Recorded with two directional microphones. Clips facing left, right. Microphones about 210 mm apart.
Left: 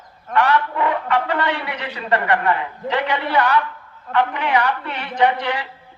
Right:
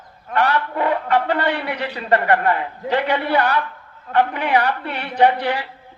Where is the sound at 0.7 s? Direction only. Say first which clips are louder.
Right 1 dB; 40° right (ahead or behind).